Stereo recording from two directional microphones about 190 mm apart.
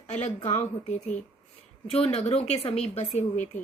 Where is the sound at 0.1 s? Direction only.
35° left (ahead or behind).